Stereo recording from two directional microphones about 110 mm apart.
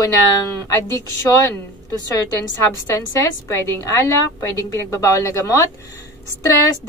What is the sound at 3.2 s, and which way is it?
A woman's voice, 30° left (ahead or behind).